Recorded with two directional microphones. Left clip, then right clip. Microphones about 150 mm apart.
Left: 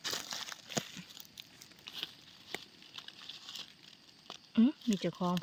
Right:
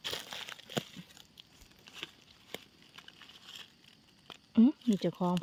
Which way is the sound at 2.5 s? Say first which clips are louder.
Left 2 dB; 90° right.